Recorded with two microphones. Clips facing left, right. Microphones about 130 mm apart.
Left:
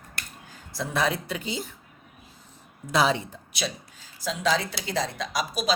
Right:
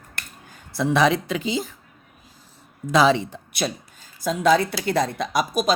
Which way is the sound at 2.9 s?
90° right.